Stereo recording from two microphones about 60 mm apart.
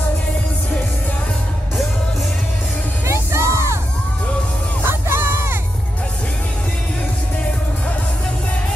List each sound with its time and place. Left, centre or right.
3.1 s music: right
4.8 s music: right